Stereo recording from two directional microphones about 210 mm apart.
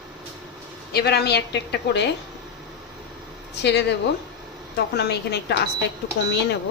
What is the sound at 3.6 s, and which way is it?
A woman's voice, 55° left (ahead or behind).